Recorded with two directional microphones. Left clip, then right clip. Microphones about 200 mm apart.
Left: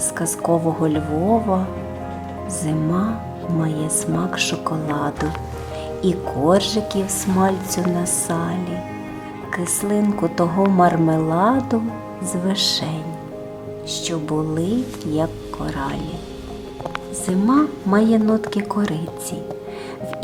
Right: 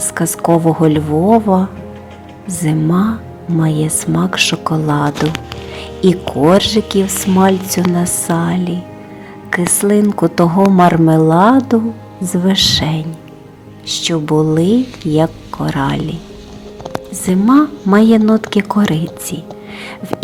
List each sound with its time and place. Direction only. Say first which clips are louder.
0.1 s speech: right 7 dB; 20° right (ahead or behind)
2.6 s speech: right 7 dB; 25° right (ahead or behind)
17.2 s speech: right 7 dB; 20° right (ahead or behind)